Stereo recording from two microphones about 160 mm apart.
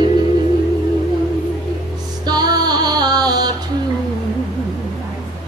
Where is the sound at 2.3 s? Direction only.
25° right (ahead or behind).